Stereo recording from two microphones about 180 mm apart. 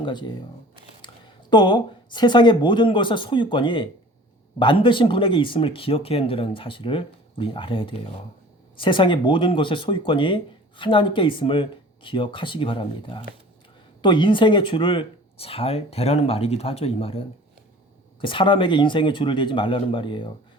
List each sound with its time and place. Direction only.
0.0 s speech: 25° left (ahead or behind)